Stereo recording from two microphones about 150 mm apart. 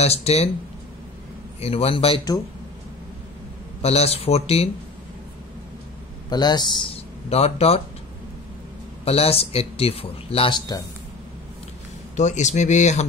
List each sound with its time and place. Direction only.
0.0 s speech: 45° left (ahead or behind)
1.6 s speech: 40° left (ahead or behind)
3.8 s speech: 45° left (ahead or behind)
6.3 s speech: 30° left (ahead or behind); by 7.8 s 45° left (ahead or behind)
9.0 s speech: 40° left (ahead or behind)
12.2 s speech: 50° left (ahead or behind)